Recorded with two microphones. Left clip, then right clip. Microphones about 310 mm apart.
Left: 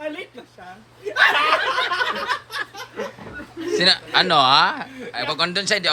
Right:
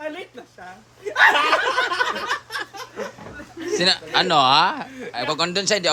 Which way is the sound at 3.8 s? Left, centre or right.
Centre.